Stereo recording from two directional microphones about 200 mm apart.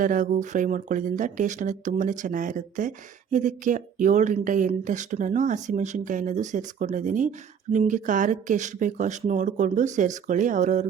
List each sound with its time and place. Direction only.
0.0 s speech: 40° right (ahead or behind)